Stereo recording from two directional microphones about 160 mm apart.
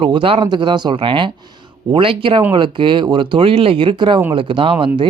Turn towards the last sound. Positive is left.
turn(degrees=-30)  # may be behind; listen again after turning